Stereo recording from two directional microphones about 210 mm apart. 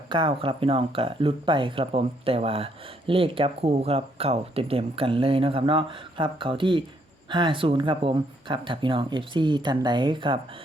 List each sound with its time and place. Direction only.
0.1 s speech: 25° right (ahead or behind)